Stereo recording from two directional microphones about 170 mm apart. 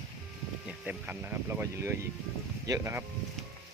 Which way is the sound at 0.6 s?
10° right (ahead or behind).